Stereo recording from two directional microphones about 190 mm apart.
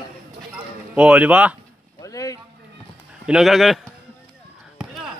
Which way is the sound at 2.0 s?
15° left (ahead or behind).